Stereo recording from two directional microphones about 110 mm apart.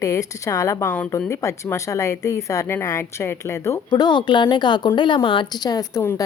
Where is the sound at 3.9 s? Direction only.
40° left (ahead or behind).